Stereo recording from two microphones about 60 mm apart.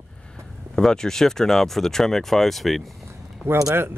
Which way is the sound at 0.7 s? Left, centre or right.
Centre.